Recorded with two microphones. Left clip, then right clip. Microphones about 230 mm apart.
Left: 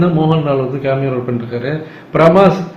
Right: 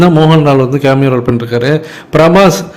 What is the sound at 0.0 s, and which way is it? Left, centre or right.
A man's voice, right.